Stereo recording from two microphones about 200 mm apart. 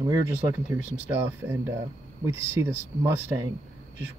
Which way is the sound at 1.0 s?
10° right (ahead or behind).